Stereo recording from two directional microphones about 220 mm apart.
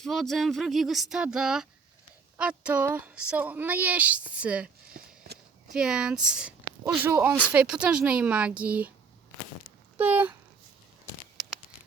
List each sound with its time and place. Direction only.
0.0 s a woman's voice: centre (ahead or behind)
4.9 s a sound: 45° right (ahead or behind)
5.7 s speech: 5° right (ahead or behind)
10.0 s a woman's voice: 10° right (ahead or behind)